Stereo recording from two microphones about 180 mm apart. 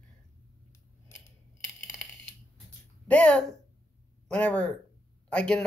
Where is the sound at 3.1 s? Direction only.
5° left (ahead or behind).